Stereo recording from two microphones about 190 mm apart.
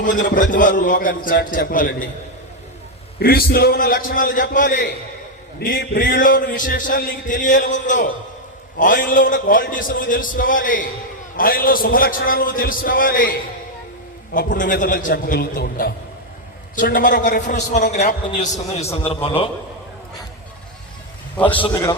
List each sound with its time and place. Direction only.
0.0 s a man's voice: 45° left (ahead or behind)
3.2 s a man's voice: 55° left (ahead or behind)
5.5 s a man's voice: 55° left (ahead or behind)
14.3 s a man's voice: 45° left (ahead or behind)
18.3 s a man's voice: 35° left (ahead or behind)
21.3 s a man's voice: 10° left (ahead or behind)